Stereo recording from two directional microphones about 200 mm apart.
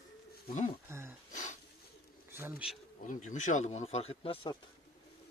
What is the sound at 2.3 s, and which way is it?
Pigeon, 10° right (ahead or behind).